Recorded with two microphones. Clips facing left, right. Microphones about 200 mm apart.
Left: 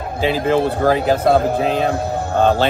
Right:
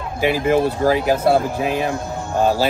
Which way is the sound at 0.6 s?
60° left (ahead or behind).